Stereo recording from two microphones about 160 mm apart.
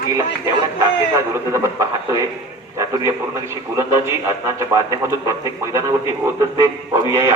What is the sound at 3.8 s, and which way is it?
A man's voice, 20° right (ahead or behind).